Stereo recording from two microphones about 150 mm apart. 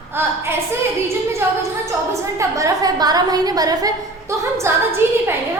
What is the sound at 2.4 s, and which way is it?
A woman's voice, 20° right (ahead or behind).